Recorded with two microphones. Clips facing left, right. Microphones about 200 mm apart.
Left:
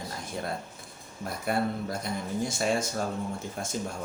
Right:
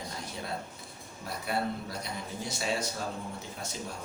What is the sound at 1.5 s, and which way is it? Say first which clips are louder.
Speech: left 4 dB; 50° left (ahead or behind).